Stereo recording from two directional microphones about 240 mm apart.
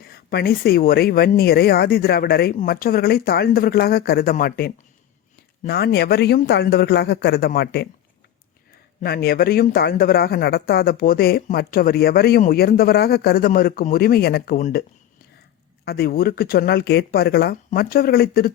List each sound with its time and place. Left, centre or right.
0.0 s a man's voice: left
9.0 s speech: left